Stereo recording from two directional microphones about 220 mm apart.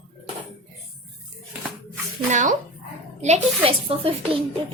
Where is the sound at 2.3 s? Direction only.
35° right (ahead or behind).